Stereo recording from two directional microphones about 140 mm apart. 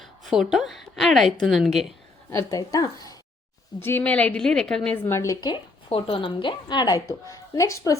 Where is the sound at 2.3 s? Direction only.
25° left (ahead or behind).